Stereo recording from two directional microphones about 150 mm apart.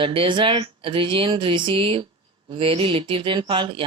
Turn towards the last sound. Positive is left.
turn(degrees=-35)  # may be behind; listen again after turning